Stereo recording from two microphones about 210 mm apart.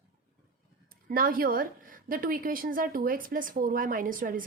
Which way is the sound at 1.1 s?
45° right (ahead or behind).